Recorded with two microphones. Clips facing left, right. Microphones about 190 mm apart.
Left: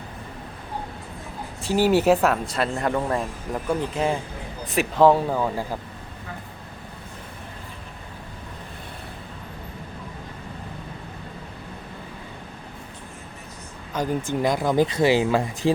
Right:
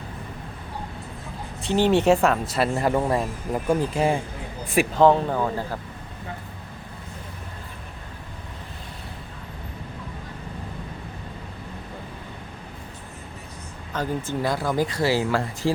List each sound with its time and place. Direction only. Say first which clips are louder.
1.6 s speech: even; 5° left (ahead or behind); by 4.2 s 10° right (ahead or behind)
4.9 s speech: left 1 dB; 5° left (ahead or behind)
13.9 s speech: left 2 dB; 15° left (ahead or behind)